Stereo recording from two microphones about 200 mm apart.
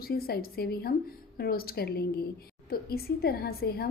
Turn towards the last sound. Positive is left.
turn(degrees=50)  # may be behind; listen again after turning